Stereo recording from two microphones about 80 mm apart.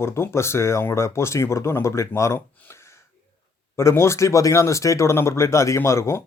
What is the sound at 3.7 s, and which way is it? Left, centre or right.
A man's voice, left.